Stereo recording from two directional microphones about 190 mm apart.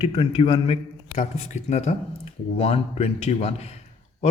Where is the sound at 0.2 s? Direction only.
30° left (ahead or behind).